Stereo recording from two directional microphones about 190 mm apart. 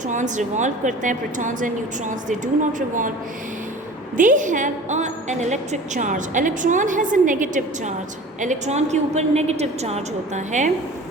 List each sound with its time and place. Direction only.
0.1 s a woman's voice: 40° right (ahead or behind)
4.2 s a woman's voice: 45° right (ahead or behind)